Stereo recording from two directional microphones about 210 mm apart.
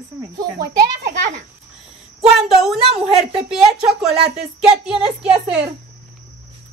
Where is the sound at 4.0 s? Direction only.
Centre (ahead or behind).